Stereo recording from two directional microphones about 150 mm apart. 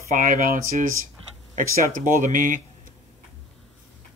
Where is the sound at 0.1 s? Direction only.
65° right (ahead or behind).